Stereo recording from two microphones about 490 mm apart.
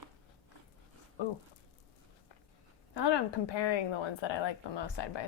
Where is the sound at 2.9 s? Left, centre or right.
Left.